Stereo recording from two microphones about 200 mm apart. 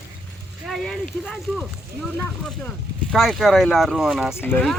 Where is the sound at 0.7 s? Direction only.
Centre (ahead or behind).